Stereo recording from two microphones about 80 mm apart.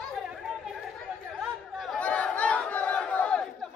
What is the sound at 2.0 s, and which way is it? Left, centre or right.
Battle cry, centre.